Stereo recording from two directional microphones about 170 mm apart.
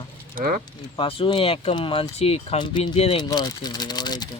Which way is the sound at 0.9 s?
30° left (ahead or behind).